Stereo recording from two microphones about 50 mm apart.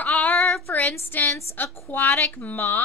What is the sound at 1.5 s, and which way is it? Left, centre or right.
Speech, left.